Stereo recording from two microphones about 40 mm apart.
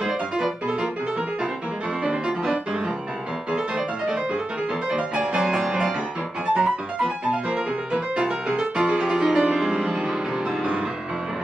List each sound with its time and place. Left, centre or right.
2.0 s music: centre
4.9 s music: right
5.3 s music: centre
8.2 s music: centre